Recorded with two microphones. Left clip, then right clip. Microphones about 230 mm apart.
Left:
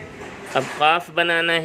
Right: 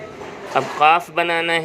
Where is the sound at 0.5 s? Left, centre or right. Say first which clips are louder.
Right 3 dB; left.